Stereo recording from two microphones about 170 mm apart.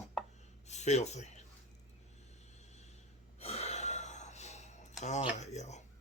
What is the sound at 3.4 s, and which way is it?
Gasp, 40° left (ahead or behind).